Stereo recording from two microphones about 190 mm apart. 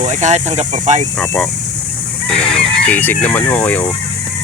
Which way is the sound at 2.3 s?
30° left (ahead or behind).